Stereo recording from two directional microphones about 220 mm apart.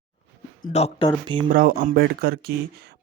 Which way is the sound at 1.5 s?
40° right (ahead or behind).